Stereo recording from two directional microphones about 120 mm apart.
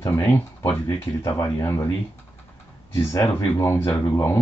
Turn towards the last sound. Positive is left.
turn(degrees=20)  # may be behind; listen again after turning